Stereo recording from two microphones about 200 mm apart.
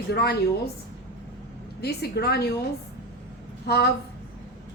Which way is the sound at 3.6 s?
55° left (ahead or behind).